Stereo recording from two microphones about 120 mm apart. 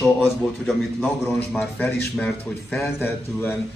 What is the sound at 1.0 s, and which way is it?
A man's voice, 15° left (ahead or behind).